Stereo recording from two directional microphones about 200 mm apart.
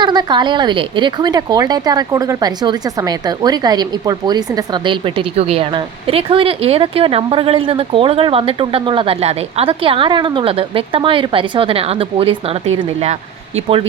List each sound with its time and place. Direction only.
0.0 s speech: 20° right (ahead or behind)